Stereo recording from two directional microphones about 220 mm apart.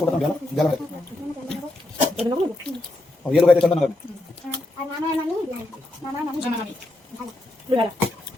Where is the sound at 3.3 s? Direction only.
Centre (ahead or behind).